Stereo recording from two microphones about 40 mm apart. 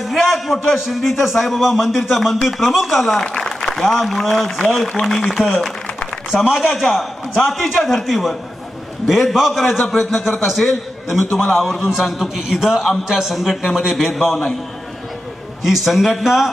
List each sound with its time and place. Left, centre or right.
0.0 s a man's voice: centre
3.3 s applause: centre
3.7 s a man's voice: centre
6.3 s a man's voice: centre
15.6 s a man's voice: centre